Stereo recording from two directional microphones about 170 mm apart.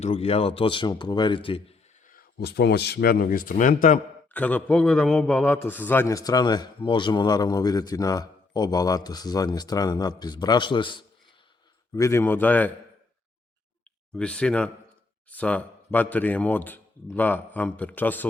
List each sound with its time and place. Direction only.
0.0 s speech: 35° left (ahead or behind)
2.0 s speech: 65° left (ahead or behind)
4.4 s a man's voice: 10° left (ahead or behind); by 11.0 s 30° left (ahead or behind)
11.9 s speech: 15° left (ahead or behind)
14.1 s speech: 5° left (ahead or behind)